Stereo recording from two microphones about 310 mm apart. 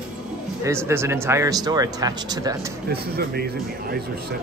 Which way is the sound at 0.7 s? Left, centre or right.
Centre.